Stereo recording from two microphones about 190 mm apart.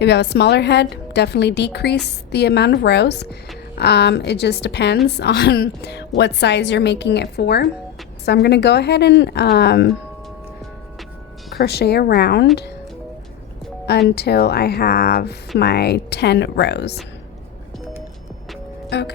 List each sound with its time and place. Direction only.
0.0 s speech: 65° left (ahead or behind)
11.5 s speech: 60° left (ahead or behind)
14.2 s speech: 60° left (ahead or behind)
18.9 s speech: 60° left (ahead or behind)